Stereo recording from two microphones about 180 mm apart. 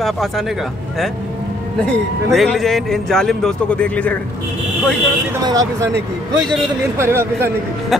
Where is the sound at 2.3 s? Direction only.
Centre (ahead or behind).